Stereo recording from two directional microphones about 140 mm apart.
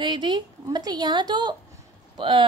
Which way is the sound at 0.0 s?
35° right (ahead or behind).